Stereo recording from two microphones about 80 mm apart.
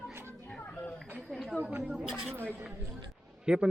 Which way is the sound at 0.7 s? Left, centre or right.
Left.